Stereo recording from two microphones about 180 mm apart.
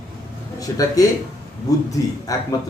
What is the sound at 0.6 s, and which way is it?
A man's voice, 20° left (ahead or behind).